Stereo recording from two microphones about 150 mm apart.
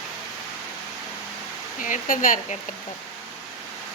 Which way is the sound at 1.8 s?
65° left (ahead or behind).